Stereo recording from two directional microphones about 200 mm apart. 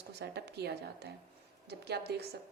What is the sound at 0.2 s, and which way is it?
A woman's voice, 55° right (ahead or behind).